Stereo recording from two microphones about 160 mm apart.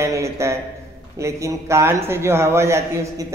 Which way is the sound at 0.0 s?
20° right (ahead or behind).